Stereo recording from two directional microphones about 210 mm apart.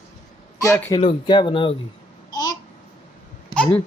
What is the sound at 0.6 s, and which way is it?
Speech, 15° left (ahead or behind).